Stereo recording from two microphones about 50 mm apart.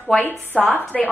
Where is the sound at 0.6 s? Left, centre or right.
Centre.